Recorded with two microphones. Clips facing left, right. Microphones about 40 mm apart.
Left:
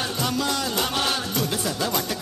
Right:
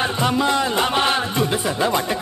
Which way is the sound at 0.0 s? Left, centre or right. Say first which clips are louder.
Right 6 dB; right.